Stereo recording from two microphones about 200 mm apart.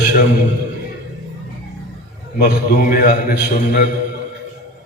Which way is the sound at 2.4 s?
45° left (ahead or behind).